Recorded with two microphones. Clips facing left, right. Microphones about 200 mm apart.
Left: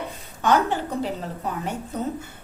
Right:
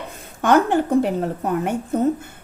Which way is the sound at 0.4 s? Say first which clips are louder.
Right 5 dB; 50° right (ahead or behind).